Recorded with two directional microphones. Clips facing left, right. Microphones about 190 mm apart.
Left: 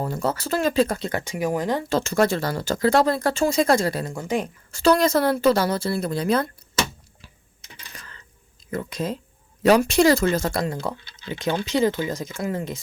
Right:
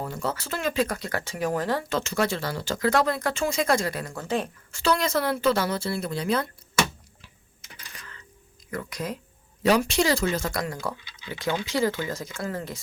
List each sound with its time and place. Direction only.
0.0 s speech: 40° left (ahead or behind); by 1.8 s 15° left (ahead or behind)
1.9 s speech: 40° left (ahead or behind)
2.8 s speech: 30° left (ahead or behind)
4.1 s speech: 15° left (ahead or behind)
4.7 s speech: 40° left (ahead or behind)
8.7 s speech: 25° left (ahead or behind)
9.6 s speech: 50° left (ahead or behind)
10.5 s speech: 25° left (ahead or behind)